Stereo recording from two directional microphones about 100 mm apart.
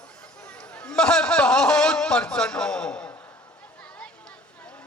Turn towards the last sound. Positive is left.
turn(degrees=10)  # may be behind; listen again after turning